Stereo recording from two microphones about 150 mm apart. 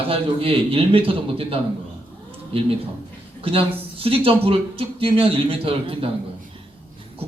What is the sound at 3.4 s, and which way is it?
A man's voice, 40° right (ahead or behind).